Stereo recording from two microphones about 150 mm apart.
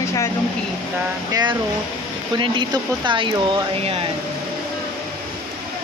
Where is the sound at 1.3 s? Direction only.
25° right (ahead or behind).